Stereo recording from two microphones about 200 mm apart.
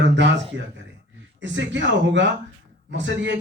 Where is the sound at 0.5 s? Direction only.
65° right (ahead or behind).